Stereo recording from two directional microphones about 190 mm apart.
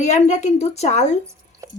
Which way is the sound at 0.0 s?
35° left (ahead or behind).